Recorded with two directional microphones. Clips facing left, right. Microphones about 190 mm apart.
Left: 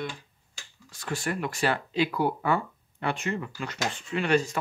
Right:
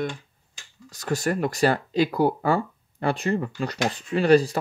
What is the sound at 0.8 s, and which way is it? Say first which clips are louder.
Speech: right 6 dB; 40° right (ahead or behind).